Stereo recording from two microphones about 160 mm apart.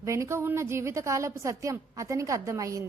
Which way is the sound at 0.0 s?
20° right (ahead or behind).